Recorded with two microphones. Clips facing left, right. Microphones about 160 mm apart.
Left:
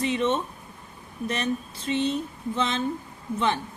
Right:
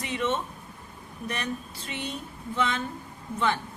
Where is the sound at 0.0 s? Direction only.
20° left (ahead or behind).